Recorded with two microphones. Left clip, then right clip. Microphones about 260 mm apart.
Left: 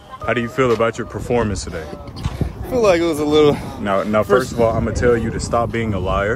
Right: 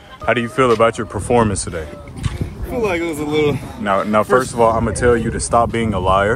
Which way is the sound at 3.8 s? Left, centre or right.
Centre.